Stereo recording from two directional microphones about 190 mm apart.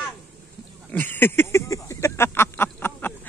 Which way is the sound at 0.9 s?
10° left (ahead or behind).